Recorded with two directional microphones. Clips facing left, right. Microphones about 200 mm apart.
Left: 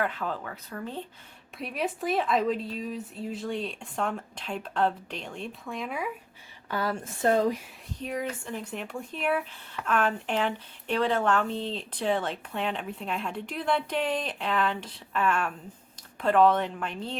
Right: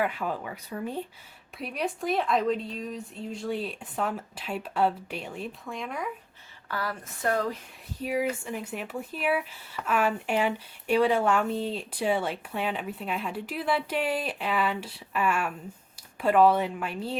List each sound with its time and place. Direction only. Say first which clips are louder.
0.0 s speech: right 2 dB; 10° right (ahead or behind)
1.5 s speech: even; centre (ahead or behind)
6.7 s speech: left 4 dB; 25° left (ahead or behind)
8.0 s speech: right 4 dB; 10° right (ahead or behind)